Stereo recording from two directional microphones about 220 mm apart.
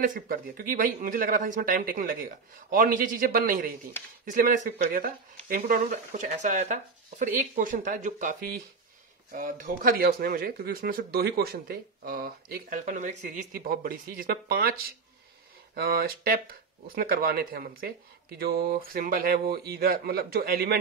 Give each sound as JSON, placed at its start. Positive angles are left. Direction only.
{"t": 0.0, "sound": "speech", "side_deg": -40}